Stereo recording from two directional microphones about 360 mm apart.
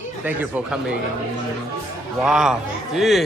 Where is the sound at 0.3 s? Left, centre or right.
Centre.